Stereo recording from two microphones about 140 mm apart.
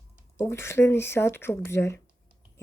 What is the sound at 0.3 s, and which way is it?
Speech, 20° left (ahead or behind).